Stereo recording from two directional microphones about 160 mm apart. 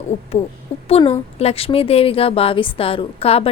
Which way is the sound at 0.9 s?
35° left (ahead or behind).